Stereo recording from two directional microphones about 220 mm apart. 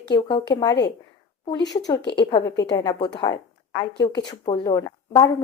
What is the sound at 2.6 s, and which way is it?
Speech, 15° left (ahead or behind).